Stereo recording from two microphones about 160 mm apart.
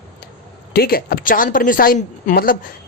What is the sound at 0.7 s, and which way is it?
A woman's voice, 70° left (ahead or behind).